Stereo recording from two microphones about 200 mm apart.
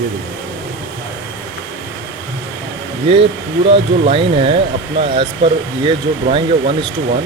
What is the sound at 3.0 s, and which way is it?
Speech, 30° right (ahead or behind).